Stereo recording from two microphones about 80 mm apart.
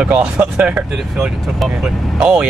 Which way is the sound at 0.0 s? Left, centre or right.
Centre.